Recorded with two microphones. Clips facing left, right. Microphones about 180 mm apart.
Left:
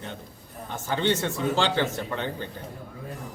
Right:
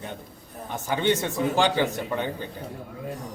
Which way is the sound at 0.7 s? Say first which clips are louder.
Right 2 dB; 15° right (ahead or behind).